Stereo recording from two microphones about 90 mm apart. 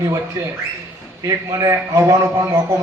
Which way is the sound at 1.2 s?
35° right (ahead or behind).